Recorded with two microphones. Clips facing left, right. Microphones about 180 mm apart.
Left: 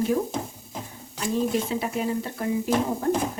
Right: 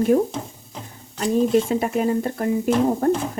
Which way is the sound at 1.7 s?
50° right (ahead or behind).